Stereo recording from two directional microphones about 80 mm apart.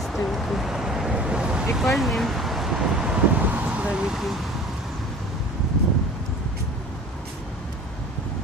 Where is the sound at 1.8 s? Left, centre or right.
Centre.